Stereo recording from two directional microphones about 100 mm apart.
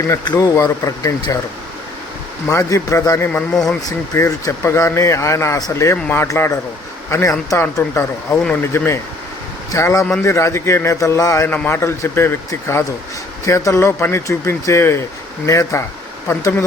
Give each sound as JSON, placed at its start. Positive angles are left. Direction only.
{"t": 0.3, "sound": "speech", "side_deg": 35}
{"t": 2.5, "sound": "speech", "side_deg": 30}
{"t": 3.5, "sound": "speech", "side_deg": 5}
{"t": 3.8, "sound": "speech", "side_deg": 35}
{"t": 11.4, "sound": "speech", "side_deg": 20}